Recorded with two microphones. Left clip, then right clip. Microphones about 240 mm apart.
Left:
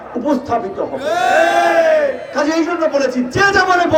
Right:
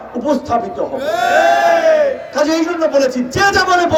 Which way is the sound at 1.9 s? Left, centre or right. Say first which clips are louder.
Right 2 dB; right.